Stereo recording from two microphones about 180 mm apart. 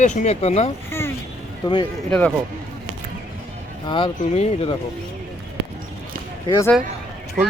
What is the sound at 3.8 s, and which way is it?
Speech, 25° left (ahead or behind).